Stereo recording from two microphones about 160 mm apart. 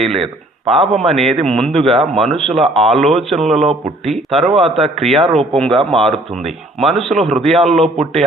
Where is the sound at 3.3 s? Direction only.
40° right (ahead or behind).